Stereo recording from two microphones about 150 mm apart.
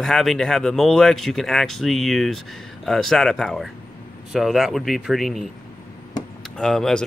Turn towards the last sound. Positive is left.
turn(degrees=5)  # may be behind; listen again after turning